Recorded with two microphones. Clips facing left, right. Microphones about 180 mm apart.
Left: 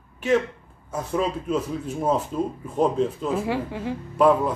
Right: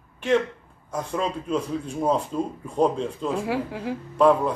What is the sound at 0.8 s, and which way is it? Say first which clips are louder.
Speech: left 2 dB; 5° left (ahead or behind).